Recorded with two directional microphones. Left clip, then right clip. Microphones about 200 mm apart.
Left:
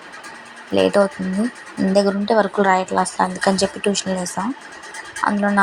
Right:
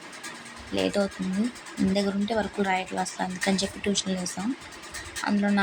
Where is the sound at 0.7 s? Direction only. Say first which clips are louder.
Left 11 dB; 10° left (ahead or behind).